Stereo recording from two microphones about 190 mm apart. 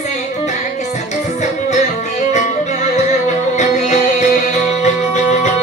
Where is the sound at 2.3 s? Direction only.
40° left (ahead or behind).